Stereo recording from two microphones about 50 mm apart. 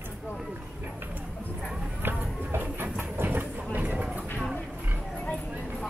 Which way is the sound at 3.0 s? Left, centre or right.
Right.